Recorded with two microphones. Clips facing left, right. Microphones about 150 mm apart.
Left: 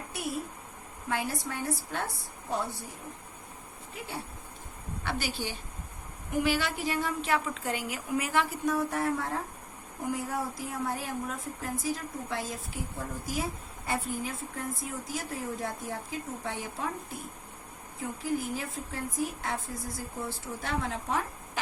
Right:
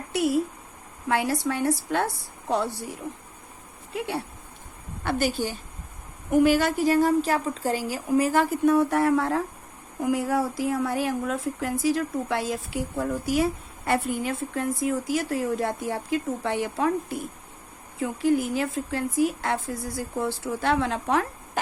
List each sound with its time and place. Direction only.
0.1 s a sound: 80° right
1.0 s a woman's voice: 75° right (ahead or behind)
3.9 s a woman's voice: 70° right (ahead or behind)
5.0 s a woman's voice: 50° right (ahead or behind)
8.6 s a woman's voice: 65° right (ahead or behind)